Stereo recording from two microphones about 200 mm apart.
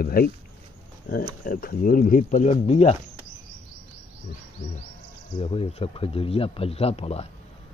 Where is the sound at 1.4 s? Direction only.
45° left (ahead or behind).